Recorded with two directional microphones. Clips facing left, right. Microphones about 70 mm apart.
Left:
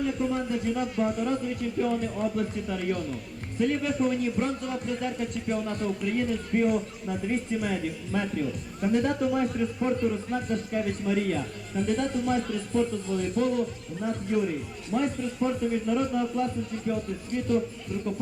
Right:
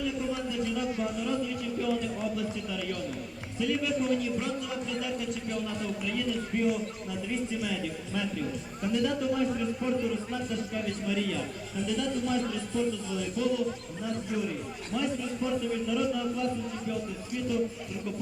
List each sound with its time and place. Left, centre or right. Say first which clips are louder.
0.0 s a man's voice: left 4 dB; left